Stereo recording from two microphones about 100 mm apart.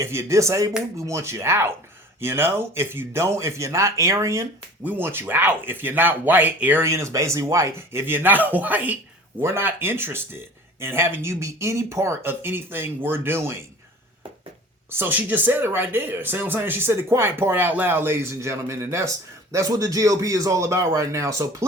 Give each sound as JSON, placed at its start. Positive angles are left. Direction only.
{"t": 0.0, "sound": "speech", "side_deg": -30}
{"t": 6.9, "sound": "speech", "side_deg": -30}
{"t": 14.8, "sound": "speech", "side_deg": -20}